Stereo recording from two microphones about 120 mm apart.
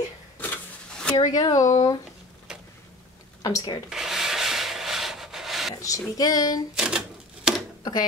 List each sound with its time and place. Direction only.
0.4 s a sound: 10° left (ahead or behind)
1.3 s female singing: 30° left (ahead or behind)
3.4 s female singing: 30° left (ahead or behind)
3.9 s rub: 5° right (ahead or behind)
5.8 s female singing: 25° left (ahead or behind)
6.7 s typewriter: 5° right (ahead or behind)